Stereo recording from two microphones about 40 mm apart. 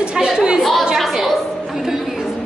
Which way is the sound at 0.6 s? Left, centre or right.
Centre.